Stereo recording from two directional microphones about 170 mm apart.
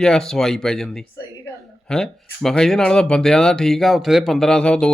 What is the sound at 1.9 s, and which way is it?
Speech, 5° left (ahead or behind).